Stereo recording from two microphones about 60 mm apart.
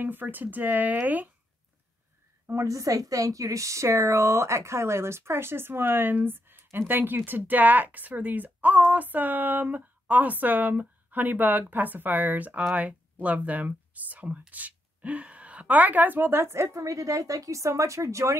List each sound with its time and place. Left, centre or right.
0.0 s speech: right
2.5 s a woman's voice: right
16.5 s a woman's voice: right